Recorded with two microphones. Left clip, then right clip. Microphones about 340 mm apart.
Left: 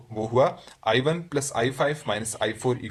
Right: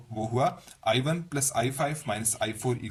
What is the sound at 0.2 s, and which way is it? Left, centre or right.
Speech, right.